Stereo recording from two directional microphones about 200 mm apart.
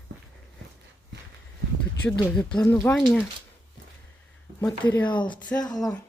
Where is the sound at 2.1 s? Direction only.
5° left (ahead or behind).